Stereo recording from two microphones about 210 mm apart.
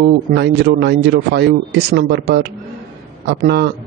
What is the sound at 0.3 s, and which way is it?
Speech, 50° right (ahead or behind).